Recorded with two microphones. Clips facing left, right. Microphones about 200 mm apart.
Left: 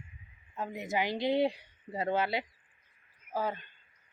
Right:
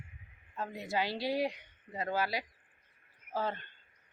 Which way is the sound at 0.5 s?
15° left (ahead or behind).